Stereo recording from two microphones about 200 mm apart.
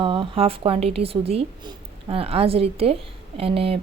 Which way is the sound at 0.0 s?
25° right (ahead or behind).